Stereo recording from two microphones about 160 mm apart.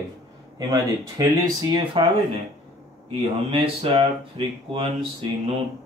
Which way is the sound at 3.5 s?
35° right (ahead or behind).